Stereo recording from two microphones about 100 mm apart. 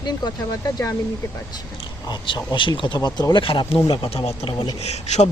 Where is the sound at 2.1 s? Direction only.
50° left (ahead or behind).